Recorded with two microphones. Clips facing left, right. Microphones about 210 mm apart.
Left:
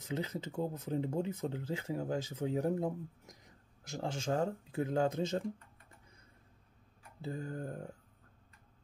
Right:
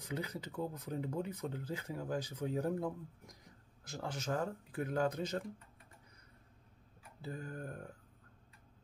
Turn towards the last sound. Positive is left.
turn(degrees=25)  # may be behind; listen again after turning